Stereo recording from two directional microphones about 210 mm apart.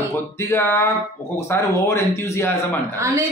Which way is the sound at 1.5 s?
10° left (ahead or behind).